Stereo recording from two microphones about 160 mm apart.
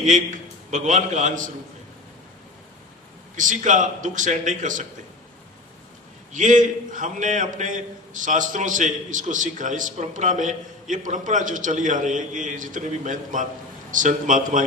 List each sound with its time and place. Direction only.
0.0 s a man's voice: 50° right (ahead or behind)
3.3 s a man's voice: 50° right (ahead or behind)
6.3 s a man's voice: 50° right (ahead or behind)